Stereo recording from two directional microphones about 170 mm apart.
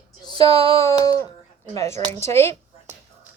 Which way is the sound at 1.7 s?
20° left (ahead or behind).